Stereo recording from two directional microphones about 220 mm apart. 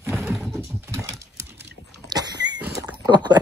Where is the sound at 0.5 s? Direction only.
10° right (ahead or behind).